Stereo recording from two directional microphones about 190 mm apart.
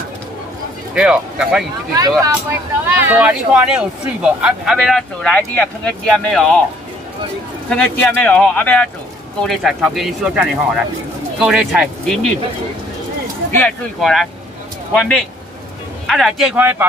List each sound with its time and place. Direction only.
0.9 s speech: 5° right (ahead or behind)
2.0 s speech: 20° right (ahead or behind); by 6.6 s 5° left (ahead or behind)
7.7 s speech: 10° left (ahead or behind)
13.5 s speech: 10° left (ahead or behind); by 16.8 s 10° right (ahead or behind)